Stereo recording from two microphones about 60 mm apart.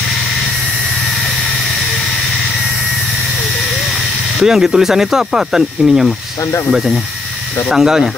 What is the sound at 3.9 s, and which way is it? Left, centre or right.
Speech, centre.